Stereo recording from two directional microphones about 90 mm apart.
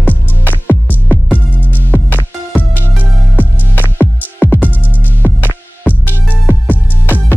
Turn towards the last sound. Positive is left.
turn(degrees=25)  # may be behind; listen again after turning